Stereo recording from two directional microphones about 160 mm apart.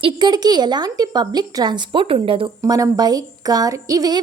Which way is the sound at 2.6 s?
20° right (ahead or behind).